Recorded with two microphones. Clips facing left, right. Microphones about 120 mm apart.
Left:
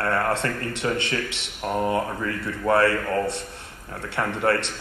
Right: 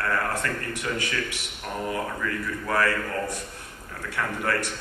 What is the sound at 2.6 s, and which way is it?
Speech, 30° left (ahead or behind).